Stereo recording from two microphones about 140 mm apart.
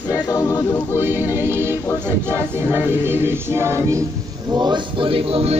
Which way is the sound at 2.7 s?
15° right (ahead or behind).